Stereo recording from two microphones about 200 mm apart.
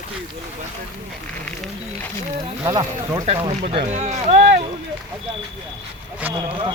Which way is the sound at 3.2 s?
30° right (ahead or behind).